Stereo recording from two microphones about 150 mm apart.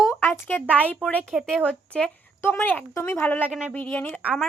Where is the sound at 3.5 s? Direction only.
5° right (ahead or behind).